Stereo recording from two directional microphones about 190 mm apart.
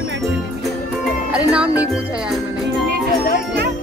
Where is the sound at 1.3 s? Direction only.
5° right (ahead or behind).